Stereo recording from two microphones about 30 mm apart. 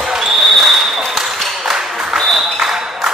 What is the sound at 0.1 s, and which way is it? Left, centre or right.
Basketball bounce, centre.